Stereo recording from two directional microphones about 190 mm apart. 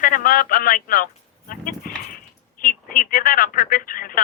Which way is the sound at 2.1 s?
45° left (ahead or behind).